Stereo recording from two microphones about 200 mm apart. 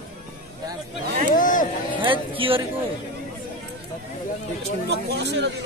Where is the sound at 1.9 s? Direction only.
25° right (ahead or behind).